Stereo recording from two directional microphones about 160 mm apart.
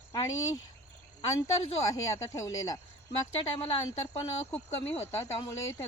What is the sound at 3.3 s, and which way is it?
Speech, 35° left (ahead or behind).